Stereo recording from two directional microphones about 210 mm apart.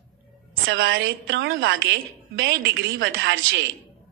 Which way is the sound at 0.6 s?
60° right (ahead or behind).